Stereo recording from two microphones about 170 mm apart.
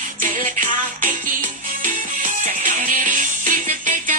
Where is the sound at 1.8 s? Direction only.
55° right (ahead or behind).